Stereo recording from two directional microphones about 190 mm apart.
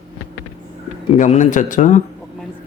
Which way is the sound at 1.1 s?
40° left (ahead or behind).